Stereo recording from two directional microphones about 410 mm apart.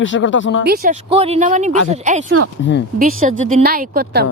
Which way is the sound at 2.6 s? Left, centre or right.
Left.